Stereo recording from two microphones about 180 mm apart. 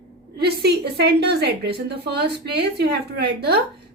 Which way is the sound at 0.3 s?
65° right (ahead or behind).